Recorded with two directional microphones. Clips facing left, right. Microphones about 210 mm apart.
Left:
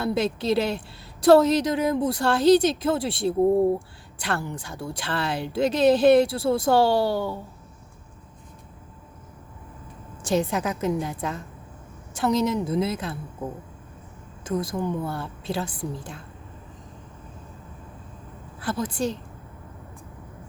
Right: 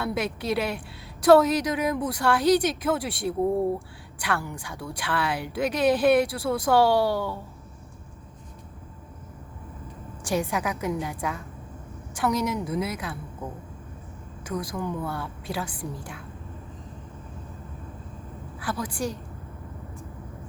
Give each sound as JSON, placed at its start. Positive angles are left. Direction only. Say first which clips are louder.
{"t": 0.0, "sound": "speech", "louder": "left 4 dB", "side_deg": 25}
{"t": 10.2, "sound": "speech", "louder": "left 3 dB", "side_deg": 25}
{"t": 14.4, "sound": "speech", "louder": "left 4 dB", "side_deg": 25}
{"t": 18.6, "sound": "speech", "louder": "left 3 dB", "side_deg": 25}